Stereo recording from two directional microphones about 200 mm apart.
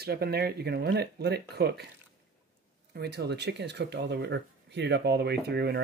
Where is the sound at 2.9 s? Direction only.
55° right (ahead or behind).